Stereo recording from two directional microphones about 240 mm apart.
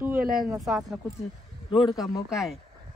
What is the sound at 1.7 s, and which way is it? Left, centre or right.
Speech, centre.